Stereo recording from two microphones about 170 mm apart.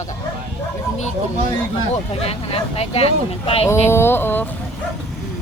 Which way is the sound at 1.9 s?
35° left (ahead or behind).